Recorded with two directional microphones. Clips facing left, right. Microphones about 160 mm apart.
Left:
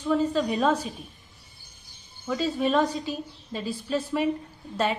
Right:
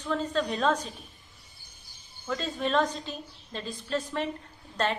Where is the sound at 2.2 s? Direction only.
5° left (ahead or behind).